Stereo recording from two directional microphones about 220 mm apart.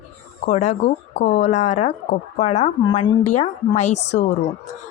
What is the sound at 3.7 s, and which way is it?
Speech, 30° left (ahead or behind).